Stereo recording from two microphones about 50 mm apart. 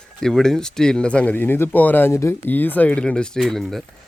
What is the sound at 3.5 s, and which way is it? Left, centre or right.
Speech, centre.